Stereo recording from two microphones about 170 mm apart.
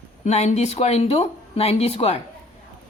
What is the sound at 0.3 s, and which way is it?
Speech, 40° left (ahead or behind).